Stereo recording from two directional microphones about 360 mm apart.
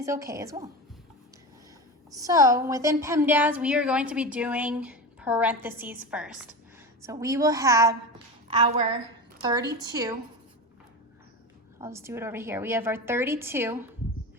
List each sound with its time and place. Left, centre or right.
0.0 s a woman's voice: centre
2.1 s a woman's voice: centre
11.8 s a woman's voice: centre